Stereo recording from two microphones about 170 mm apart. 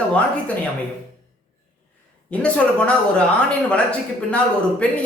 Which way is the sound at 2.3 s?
5° left (ahead or behind).